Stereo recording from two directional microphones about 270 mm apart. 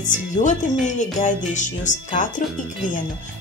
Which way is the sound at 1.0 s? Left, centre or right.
Left.